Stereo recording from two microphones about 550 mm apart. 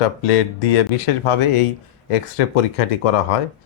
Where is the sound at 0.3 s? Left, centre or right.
Left.